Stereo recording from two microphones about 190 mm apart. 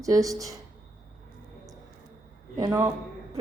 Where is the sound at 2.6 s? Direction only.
20° right (ahead or behind).